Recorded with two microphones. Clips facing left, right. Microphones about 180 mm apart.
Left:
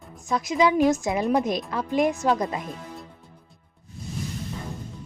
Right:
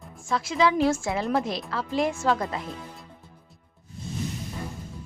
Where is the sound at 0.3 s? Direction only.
20° left (ahead or behind).